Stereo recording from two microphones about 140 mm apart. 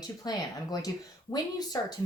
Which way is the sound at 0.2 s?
25° left (ahead or behind).